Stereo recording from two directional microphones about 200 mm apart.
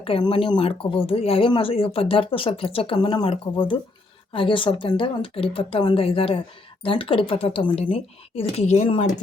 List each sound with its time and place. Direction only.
0.0 s speech: 25° left (ahead or behind)